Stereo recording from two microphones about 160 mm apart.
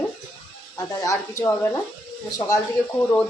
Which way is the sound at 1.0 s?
20° left (ahead or behind).